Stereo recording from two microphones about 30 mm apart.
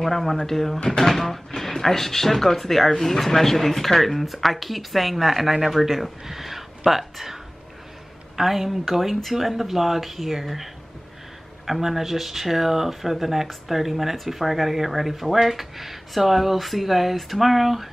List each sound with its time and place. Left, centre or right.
0.0 s speech: centre
8.4 s speech: centre